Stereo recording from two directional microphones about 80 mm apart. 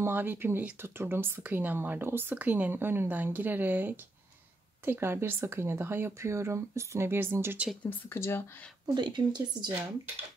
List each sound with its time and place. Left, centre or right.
0.0 s speech: right
8.1 s speech: left
8.8 s speech: right